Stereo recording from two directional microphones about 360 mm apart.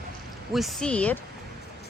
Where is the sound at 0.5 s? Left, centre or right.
Centre.